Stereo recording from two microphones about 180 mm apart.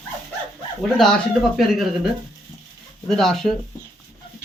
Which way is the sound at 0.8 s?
Centre (ahead or behind).